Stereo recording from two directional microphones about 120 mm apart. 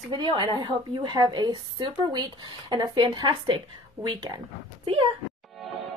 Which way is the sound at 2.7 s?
40° right (ahead or behind).